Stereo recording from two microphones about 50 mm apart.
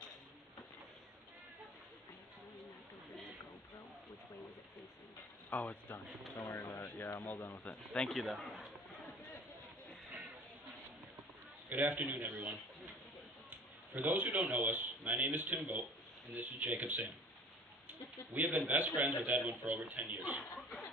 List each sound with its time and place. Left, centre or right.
5.5 s speech: left
6.5 s speech: left
7.2 s speech: left
7.6 s speech: left
8.1 s speech: centre
11.7 s speech: right
13.5 s a sound: right
14.5 s speech: right
18.3 s speech: right